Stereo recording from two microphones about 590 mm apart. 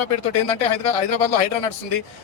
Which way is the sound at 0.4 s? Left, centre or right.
Left.